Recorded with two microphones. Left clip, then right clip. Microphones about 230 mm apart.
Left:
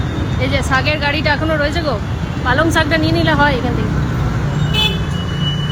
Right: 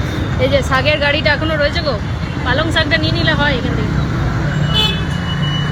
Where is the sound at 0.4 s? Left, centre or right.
Centre.